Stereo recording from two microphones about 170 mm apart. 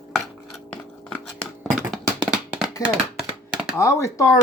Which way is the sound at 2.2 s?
5° right (ahead or behind).